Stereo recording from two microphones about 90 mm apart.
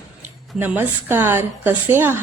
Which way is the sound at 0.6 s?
25° right (ahead or behind).